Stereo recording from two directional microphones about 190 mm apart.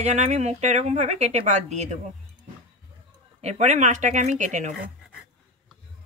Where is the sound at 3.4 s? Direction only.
35° right (ahead or behind).